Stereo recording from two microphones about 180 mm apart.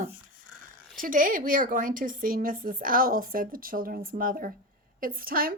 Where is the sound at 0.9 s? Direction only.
50° right (ahead or behind).